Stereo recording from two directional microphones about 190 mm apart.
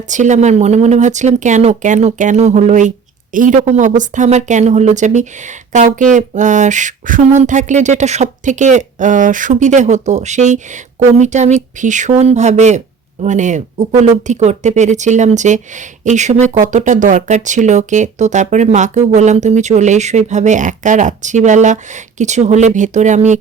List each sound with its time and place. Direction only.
0.1 s speech: 40° right (ahead or behind)